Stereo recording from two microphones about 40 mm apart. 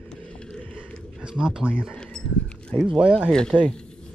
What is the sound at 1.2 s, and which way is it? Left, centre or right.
Speech, right.